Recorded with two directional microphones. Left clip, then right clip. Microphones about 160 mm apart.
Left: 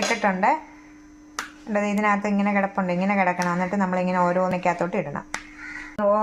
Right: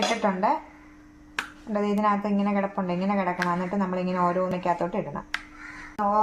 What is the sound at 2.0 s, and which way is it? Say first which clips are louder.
A woman's voice: left 2 dB; 25° left (ahead or behind).